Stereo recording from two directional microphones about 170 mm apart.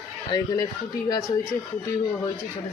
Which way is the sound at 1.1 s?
20° left (ahead or behind).